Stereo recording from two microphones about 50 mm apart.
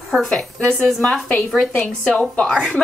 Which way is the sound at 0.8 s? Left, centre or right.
Centre.